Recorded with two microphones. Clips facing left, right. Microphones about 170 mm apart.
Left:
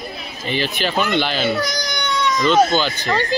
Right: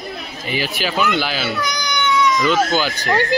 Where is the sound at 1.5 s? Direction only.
40° left (ahead or behind).